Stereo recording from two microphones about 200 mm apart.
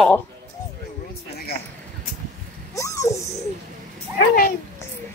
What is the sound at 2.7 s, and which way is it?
Dog, 15° left (ahead or behind).